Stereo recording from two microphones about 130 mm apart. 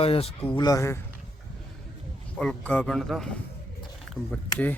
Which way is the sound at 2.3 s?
5° left (ahead or behind).